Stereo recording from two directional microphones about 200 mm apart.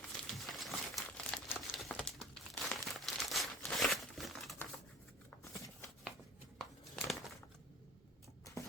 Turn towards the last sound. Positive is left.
turn(degrees=0)  # may be behind; listen again after turning